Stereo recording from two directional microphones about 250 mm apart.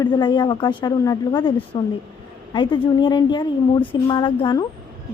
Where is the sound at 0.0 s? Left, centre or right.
Centre.